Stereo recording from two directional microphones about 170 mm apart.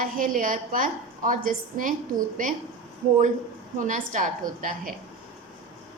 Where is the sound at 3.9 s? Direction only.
50° right (ahead or behind).